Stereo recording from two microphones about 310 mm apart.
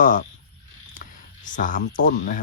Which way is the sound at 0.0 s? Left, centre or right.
Left.